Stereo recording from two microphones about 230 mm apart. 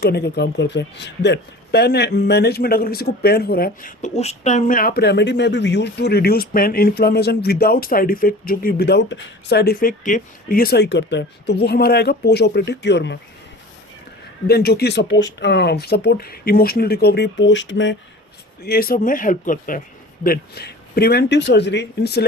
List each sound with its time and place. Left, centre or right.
0.0 s speech: left
14.4 s speech: left
18.6 s speech: left